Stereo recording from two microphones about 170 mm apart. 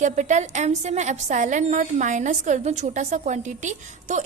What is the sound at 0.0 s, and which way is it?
A woman's voice, 45° right (ahead or behind).